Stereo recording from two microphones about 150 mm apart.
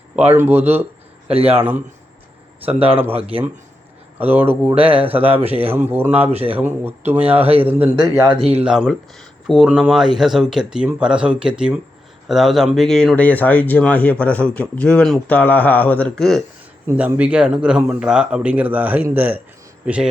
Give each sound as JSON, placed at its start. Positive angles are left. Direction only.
{"t": 0.2, "sound": "speech", "side_deg": -10}
{"t": 3.0, "sound": "speech", "side_deg": -10}
{"t": 4.7, "sound": "speech", "side_deg": -40}
{"t": 4.9, "sound": "speech", "side_deg": -10}
{"t": 6.3, "sound": "speech", "side_deg": -40}
{"t": 6.6, "sound": "speech", "side_deg": -10}
{"t": 8.5, "sound": "speech", "side_deg": -5}
{"t": 16.8, "sound": "speech", "side_deg": -10}